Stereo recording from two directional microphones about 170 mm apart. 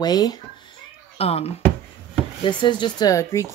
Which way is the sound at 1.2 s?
35° left (ahead or behind).